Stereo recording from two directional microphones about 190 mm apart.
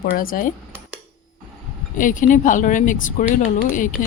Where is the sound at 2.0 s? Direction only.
45° left (ahead or behind).